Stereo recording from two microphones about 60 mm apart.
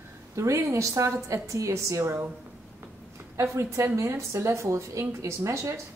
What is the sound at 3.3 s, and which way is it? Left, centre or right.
A woman's voice, right.